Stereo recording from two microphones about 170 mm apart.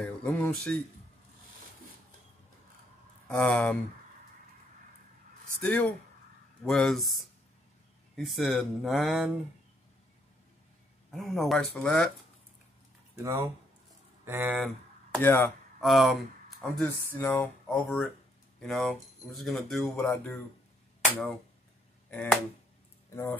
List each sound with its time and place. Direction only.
0.0 s speech: 5° left (ahead or behind)
3.3 s speech: 10° left (ahead or behind)
5.6 s speech: 10° left (ahead or behind)
11.1 s speech: centre (ahead or behind)
13.1 s speech: 20° right (ahead or behind)
15.1 s speech: 15° left (ahead or behind)
15.8 s speech: centre (ahead or behind)
22.1 s speech: 10° left (ahead or behind)